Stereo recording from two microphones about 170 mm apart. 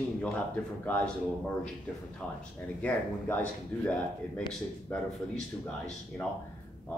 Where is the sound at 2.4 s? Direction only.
10° left (ahead or behind).